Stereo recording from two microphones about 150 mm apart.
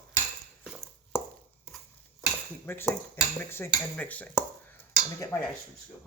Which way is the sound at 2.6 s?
15° left (ahead or behind).